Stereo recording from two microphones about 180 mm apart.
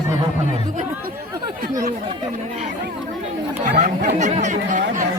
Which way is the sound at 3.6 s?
45° right (ahead or behind).